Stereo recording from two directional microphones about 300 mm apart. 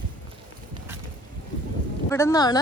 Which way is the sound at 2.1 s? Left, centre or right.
Centre.